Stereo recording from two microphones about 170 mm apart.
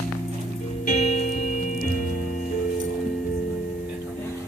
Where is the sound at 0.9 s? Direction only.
50° left (ahead or behind).